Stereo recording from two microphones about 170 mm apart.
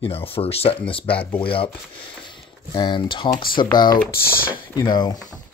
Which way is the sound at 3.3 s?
55° left (ahead or behind).